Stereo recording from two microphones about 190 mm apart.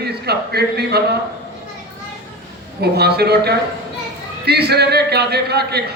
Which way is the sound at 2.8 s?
60° right (ahead or behind).